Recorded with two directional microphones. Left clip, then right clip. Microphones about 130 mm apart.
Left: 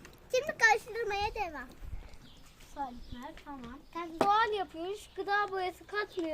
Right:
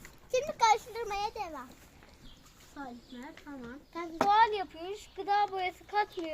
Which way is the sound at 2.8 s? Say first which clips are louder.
Left 5 dB; 10° left (ahead or behind).